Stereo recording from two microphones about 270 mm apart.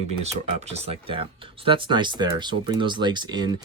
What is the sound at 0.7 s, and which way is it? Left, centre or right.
Speech, right.